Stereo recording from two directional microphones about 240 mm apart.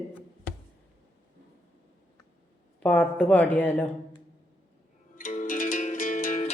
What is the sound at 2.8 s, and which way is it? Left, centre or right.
Speech, centre.